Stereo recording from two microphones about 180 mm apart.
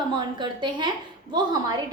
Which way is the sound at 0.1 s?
25° right (ahead or behind).